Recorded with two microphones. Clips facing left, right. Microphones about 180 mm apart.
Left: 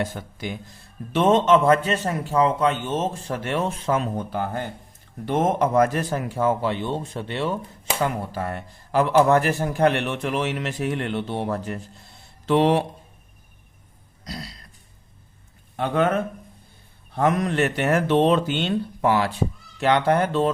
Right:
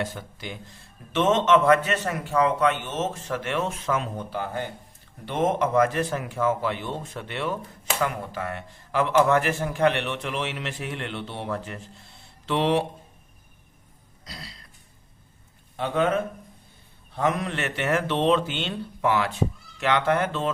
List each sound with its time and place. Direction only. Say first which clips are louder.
0.0 s a man's voice: left 3 dB; 45° left (ahead or behind)
1.1 s a man's voice: left 3 dB; 35° left (ahead or behind)
4.3 s a man's voice: left 3 dB; 50° left (ahead or behind)
14.3 s a sound: left 7 dB; 40° left (ahead or behind)
17.2 s a man's voice: left 5 dB; 45° left (ahead or behind)